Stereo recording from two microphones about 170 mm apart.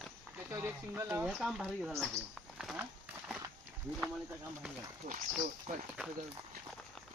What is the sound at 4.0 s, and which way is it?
Speech, 5° right (ahead or behind).